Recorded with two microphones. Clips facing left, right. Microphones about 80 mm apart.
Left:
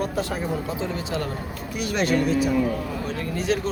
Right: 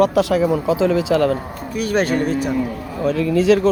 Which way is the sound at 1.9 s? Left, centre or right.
Right.